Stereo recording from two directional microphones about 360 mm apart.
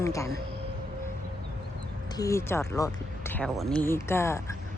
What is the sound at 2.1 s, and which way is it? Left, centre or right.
Speech, centre.